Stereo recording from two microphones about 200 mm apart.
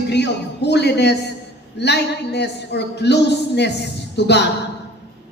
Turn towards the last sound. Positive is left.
turn(degrees=60)  # may be behind; listen again after turning